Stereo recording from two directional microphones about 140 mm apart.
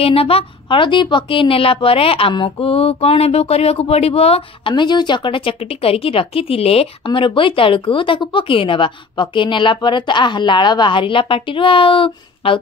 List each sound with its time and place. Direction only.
0.0 s a woman's voice: 45° left (ahead or behind)